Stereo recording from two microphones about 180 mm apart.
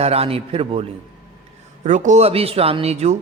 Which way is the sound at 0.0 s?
35° right (ahead or behind).